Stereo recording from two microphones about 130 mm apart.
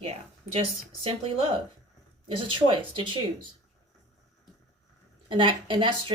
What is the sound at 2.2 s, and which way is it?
Speech, 40° right (ahead or behind).